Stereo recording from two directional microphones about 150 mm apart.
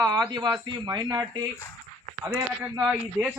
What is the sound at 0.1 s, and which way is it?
Speech, 30° right (ahead or behind).